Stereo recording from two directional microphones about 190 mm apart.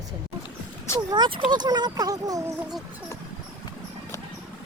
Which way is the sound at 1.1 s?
25° right (ahead or behind).